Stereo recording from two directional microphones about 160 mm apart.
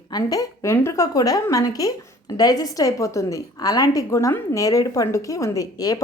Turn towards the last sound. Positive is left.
turn(degrees=20)  # may be behind; listen again after turning